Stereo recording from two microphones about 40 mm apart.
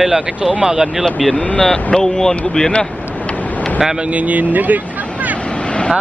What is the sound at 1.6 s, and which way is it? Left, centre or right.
Speech, centre.